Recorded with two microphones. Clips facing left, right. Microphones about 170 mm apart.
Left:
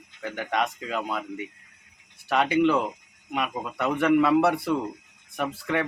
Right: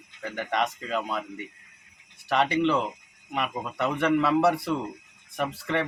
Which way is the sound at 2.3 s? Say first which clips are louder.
Left 2 dB; 5° left (ahead or behind).